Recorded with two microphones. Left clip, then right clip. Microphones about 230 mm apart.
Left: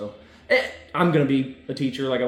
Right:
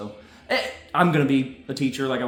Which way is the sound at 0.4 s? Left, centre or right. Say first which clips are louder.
Left 4 dB; centre.